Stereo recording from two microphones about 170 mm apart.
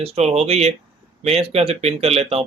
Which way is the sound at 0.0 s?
40° right (ahead or behind).